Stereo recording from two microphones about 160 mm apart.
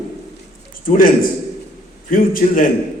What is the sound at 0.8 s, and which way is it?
A man's voice, 60° left (ahead or behind).